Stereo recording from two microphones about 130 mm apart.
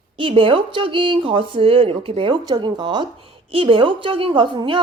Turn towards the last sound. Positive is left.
turn(degrees=-40)  # may be behind; listen again after turning